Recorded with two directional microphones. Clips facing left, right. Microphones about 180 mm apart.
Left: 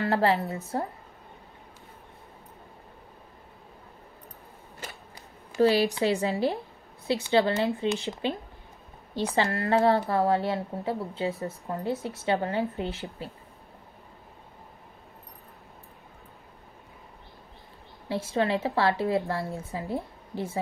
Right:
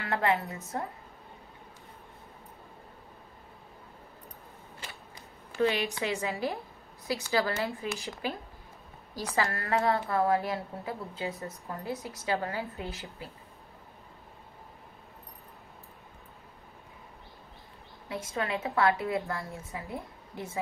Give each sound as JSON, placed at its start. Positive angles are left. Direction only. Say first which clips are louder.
{"t": 0.0, "sound": "a woman's voice", "louder": "left 5 dB", "side_deg": 35}
{"t": 5.6, "sound": "a woman's voice", "louder": "left 6 dB", "side_deg": 35}
{"t": 18.0, "sound": "a woman's voice", "louder": "left 7 dB", "side_deg": 30}